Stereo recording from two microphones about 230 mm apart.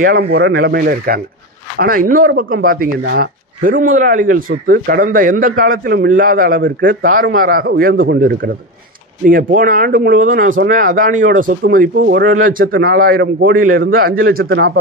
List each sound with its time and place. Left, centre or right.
0.0 s speech: right